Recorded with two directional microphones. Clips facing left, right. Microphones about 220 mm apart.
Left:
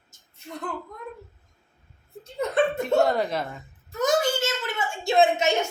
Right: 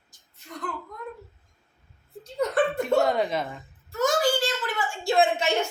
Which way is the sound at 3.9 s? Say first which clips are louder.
Even; 20° left (ahead or behind).